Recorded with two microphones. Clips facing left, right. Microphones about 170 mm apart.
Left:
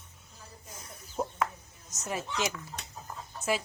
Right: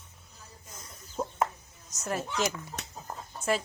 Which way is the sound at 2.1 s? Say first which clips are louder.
Right 2 dB; centre (ahead or behind).